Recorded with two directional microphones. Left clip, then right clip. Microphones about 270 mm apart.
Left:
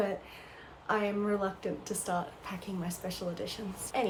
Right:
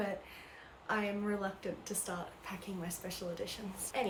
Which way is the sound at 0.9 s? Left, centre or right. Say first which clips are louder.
Left 5 dB; centre.